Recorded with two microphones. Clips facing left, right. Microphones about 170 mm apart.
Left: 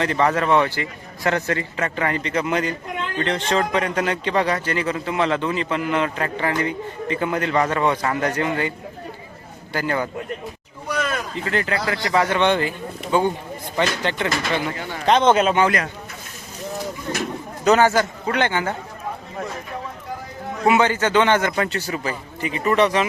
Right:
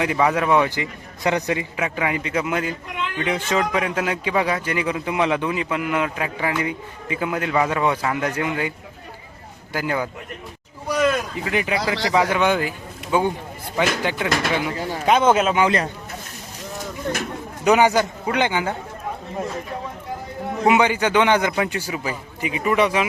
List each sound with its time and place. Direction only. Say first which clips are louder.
0.0 s a man's voice: even; 10° right (ahead or behind)
9.7 s a man's voice: left 1 dB; 10° right (ahead or behind)
12.4 s a man's voice: left 1 dB; 5° right (ahead or behind)
17.6 s a man's voice: even; 15° right (ahead or behind)
20.7 s a man's voice: even; 15° right (ahead or behind)